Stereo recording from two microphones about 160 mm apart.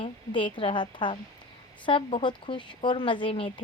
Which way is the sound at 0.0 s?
30° left (ahead or behind).